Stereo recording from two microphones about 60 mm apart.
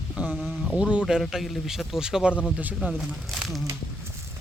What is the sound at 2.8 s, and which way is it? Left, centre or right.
Speech, right.